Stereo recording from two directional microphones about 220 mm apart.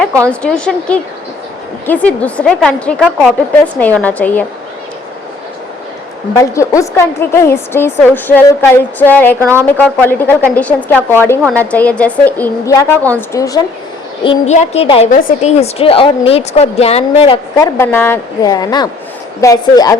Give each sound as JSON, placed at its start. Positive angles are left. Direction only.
{"t": 0.3, "sound": "a woman's voice", "side_deg": 5}
{"t": 6.3, "sound": "a woman's voice", "side_deg": 15}
{"t": 9.4, "sound": "a woman's voice", "side_deg": -10}
{"t": 9.7, "sound": "a woman's voice", "side_deg": 10}
{"t": 14.3, "sound": "a woman's voice", "side_deg": 30}
{"t": 17.6, "sound": "a woman's voice", "side_deg": 10}